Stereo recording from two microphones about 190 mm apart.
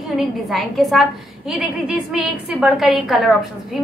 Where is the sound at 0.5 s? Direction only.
Centre (ahead or behind).